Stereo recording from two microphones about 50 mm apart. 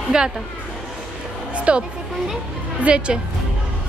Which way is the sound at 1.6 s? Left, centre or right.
Right.